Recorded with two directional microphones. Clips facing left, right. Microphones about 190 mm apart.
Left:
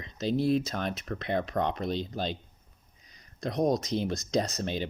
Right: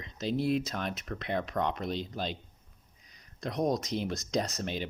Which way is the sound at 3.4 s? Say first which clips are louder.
Left 3 dB; 35° left (ahead or behind).